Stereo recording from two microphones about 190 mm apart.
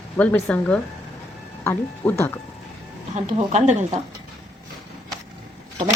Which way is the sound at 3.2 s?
35° right (ahead or behind).